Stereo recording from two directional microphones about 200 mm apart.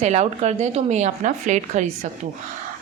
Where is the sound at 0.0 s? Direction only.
35° right (ahead or behind).